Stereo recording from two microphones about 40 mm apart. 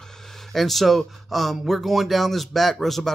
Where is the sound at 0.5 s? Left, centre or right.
Centre.